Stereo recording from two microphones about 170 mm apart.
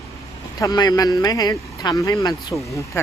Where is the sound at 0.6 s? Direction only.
25° left (ahead or behind).